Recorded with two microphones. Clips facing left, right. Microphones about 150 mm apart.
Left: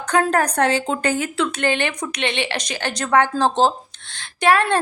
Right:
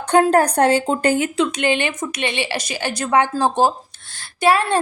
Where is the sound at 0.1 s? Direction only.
30° right (ahead or behind).